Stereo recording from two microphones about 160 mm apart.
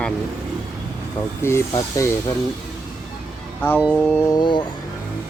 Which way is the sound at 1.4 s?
15° left (ahead or behind).